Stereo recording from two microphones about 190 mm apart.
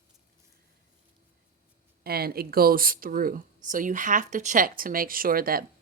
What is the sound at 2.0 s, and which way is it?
Speech, 55° right (ahead or behind).